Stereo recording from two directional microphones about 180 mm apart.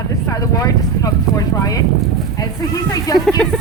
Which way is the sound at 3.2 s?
5° left (ahead or behind).